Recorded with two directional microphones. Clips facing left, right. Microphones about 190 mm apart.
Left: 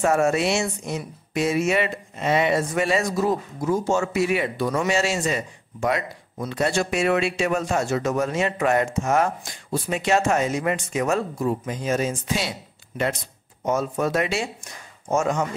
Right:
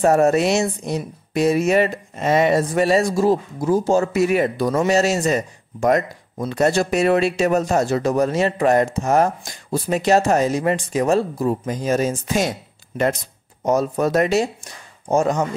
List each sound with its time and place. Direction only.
0.0 s speech: 40° right (ahead or behind)